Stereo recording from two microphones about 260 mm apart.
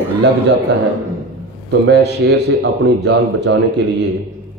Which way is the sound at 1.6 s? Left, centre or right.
Right.